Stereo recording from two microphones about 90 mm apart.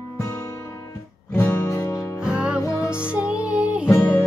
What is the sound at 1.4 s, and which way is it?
Music, 35° left (ahead or behind).